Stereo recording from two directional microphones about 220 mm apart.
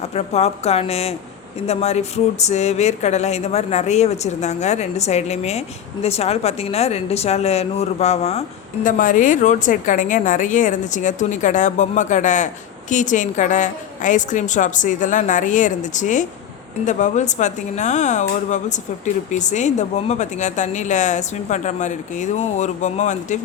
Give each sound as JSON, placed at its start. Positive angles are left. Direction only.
{"t": 0.1, "sound": "speech", "side_deg": 30}